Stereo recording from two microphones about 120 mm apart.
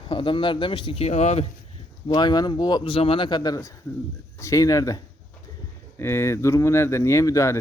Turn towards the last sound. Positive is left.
turn(degrees=25)  # may be behind; listen again after turning